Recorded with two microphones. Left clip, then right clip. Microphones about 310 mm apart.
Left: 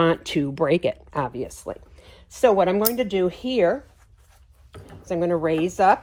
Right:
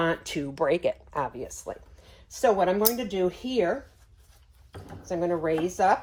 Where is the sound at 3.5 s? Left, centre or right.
Centre.